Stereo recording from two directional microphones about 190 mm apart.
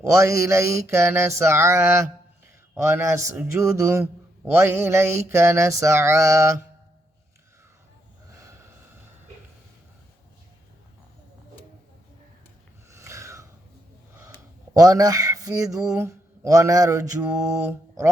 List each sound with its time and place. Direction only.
0.1 s speech: 15° right (ahead or behind)
12.9 s a sound: 15° right (ahead or behind)
14.7 s speech: 20° right (ahead or behind)
17.7 s mantra: 15° right (ahead or behind)